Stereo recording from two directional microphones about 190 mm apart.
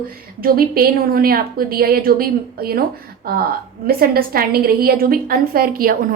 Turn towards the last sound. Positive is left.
turn(degrees=-50)  # may be behind; listen again after turning